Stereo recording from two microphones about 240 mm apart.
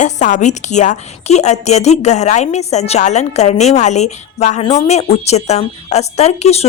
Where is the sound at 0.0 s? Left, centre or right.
Left.